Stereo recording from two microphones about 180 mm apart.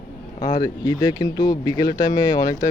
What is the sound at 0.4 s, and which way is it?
Speech, 25° left (ahead or behind).